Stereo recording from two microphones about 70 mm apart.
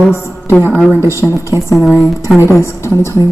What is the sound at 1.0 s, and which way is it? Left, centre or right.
Speech, right.